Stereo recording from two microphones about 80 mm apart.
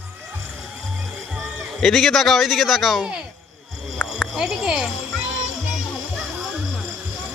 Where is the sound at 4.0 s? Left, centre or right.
Centre.